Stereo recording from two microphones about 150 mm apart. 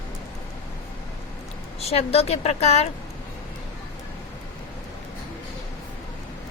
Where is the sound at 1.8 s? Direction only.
45° left (ahead or behind).